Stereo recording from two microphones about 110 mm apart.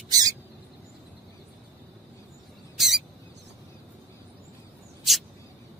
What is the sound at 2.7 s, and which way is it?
Rodents, centre (ahead or behind).